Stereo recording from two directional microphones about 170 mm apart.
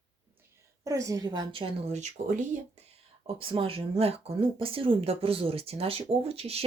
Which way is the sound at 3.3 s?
30° right (ahead or behind).